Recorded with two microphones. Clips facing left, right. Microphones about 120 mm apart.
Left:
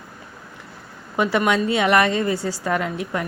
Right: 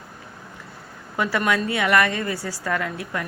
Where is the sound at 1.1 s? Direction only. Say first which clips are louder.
Left 3 dB; 20° left (ahead or behind).